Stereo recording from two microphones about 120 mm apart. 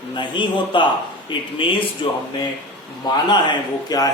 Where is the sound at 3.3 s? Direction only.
35° left (ahead or behind).